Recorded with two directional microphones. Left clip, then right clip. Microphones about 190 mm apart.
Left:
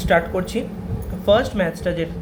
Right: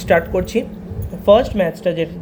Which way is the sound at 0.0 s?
25° right (ahead or behind).